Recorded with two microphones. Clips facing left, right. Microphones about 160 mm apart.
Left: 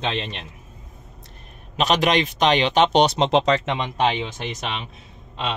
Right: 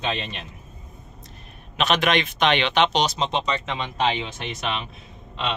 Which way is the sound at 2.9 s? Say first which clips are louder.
Left 6 dB; 65° left (ahead or behind).